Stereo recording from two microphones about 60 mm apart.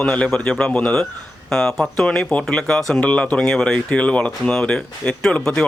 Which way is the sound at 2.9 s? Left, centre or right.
Left.